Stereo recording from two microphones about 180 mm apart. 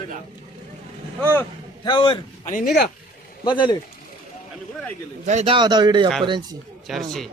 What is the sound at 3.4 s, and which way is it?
Speech, 25° left (ahead or behind).